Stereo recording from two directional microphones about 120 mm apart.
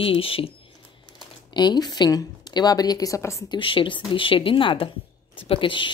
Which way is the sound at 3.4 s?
40° left (ahead or behind).